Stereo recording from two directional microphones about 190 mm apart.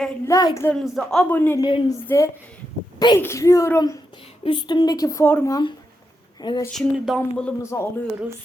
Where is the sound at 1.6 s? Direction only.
20° left (ahead or behind).